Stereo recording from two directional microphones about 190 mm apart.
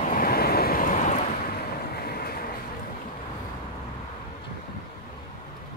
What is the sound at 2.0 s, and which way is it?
Train, 55° left (ahead or behind).